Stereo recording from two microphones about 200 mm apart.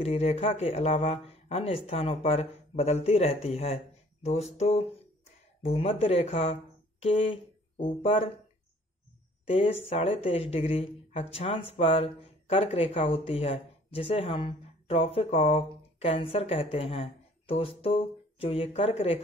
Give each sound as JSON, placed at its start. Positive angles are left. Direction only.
{"t": 0.0, "sound": "speech", "side_deg": 30}
{"t": 9.5, "sound": "speech", "side_deg": 30}